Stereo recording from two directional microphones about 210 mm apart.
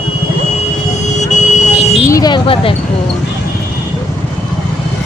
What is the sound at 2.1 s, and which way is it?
A woman's voice, 20° left (ahead or behind).